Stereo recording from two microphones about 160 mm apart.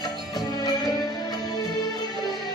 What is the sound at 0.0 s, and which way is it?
Music, 25° left (ahead or behind).